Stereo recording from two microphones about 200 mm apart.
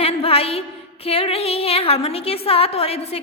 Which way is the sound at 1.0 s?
30° left (ahead or behind).